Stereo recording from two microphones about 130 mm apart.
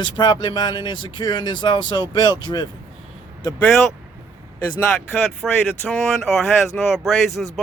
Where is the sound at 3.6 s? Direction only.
5° left (ahead or behind).